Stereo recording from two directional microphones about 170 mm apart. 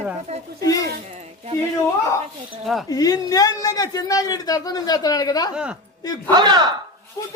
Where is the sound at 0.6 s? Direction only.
20° left (ahead or behind).